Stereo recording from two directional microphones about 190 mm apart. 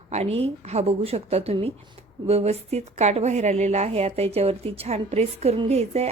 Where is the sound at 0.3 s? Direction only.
35° right (ahead or behind).